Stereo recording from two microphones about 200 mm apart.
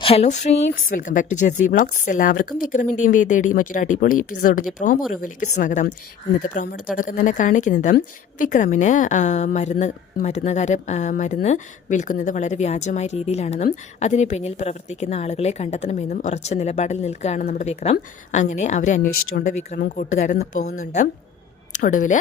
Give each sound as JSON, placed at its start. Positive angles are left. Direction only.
{"t": 0.0, "sound": "a woman's voice", "side_deg": 30}
{"t": 21.8, "sound": "a woman's voice", "side_deg": 40}